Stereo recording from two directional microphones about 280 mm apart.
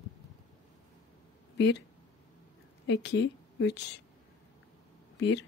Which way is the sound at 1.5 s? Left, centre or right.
Left.